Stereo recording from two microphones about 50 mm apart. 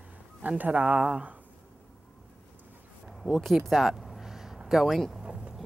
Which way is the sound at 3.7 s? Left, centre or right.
Centre.